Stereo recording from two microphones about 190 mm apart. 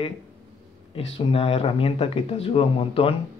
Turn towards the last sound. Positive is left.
turn(degrees=30)  # may be behind; listen again after turning